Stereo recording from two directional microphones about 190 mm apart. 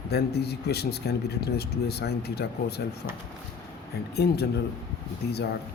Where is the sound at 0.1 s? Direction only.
60° left (ahead or behind).